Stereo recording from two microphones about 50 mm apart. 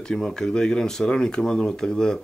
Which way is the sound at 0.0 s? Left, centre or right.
Centre.